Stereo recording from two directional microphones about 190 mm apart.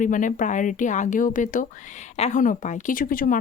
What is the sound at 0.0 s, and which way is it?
Speech, 45° left (ahead or behind).